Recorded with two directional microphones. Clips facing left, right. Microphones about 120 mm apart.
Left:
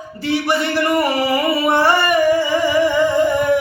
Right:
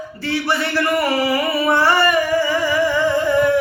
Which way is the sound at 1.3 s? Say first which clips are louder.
Left 1 dB; 25° left (ahead or behind).